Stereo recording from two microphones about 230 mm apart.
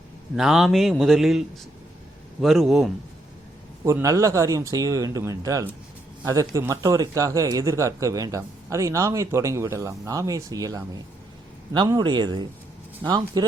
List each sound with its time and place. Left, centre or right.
0.3 s speech: centre
3.8 s speech: centre